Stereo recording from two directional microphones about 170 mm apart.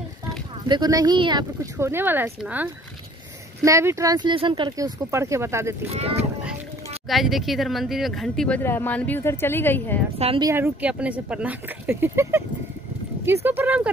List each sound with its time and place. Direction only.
0.7 s speech: 25° right (ahead or behind)
5.9 s speech: 35° right (ahead or behind)
7.1 s speech: centre (ahead or behind)
10.1 s speech: 35° right (ahead or behind)
10.4 s speech: 15° right (ahead or behind)